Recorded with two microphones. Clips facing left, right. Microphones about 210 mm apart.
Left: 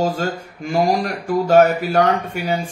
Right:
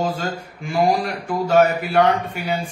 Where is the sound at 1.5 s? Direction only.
40° left (ahead or behind).